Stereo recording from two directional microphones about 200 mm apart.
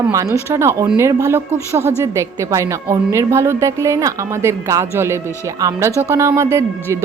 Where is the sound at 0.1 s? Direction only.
15° right (ahead or behind).